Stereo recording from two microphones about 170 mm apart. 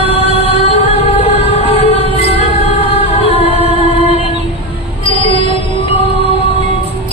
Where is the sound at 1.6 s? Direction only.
35° left (ahead or behind).